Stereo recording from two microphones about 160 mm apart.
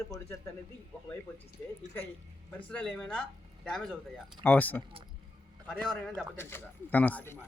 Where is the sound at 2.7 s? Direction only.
5° left (ahead or behind).